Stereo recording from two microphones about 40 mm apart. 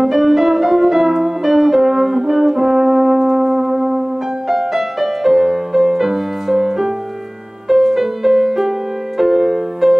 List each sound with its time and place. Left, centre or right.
0.0 s music: centre